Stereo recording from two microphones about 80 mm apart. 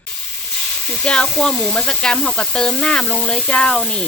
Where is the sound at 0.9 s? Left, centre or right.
Centre.